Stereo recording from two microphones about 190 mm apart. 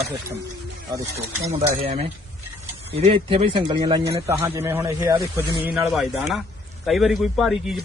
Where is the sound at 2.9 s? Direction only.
30° right (ahead or behind); by 5.2 s 15° right (ahead or behind).